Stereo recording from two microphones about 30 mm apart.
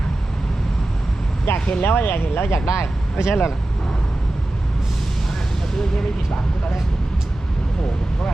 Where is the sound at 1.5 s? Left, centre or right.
Left.